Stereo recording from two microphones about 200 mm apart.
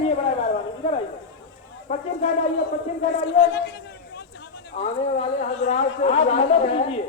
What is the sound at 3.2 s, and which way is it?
Speech, 55° left (ahead or behind).